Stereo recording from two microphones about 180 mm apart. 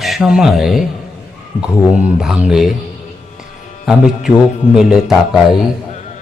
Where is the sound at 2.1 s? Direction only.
5° right (ahead or behind).